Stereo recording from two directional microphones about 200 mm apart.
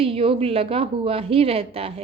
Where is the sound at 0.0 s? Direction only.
30° right (ahead or behind).